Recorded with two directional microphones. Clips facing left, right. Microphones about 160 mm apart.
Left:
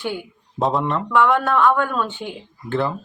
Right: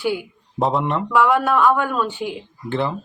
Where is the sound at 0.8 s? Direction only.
15° right (ahead or behind).